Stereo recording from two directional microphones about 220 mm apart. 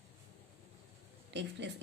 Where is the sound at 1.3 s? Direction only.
50° right (ahead or behind).